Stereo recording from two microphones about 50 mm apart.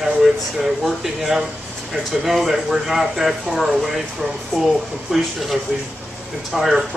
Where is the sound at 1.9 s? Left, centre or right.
Centre.